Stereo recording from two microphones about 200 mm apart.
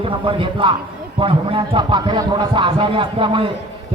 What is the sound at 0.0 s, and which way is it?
A man's voice, 25° right (ahead or behind).